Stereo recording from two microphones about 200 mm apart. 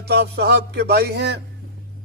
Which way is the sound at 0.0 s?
55° right (ahead or behind).